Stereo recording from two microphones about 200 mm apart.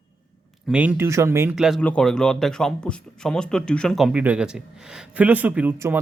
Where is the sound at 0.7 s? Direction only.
5° right (ahead or behind).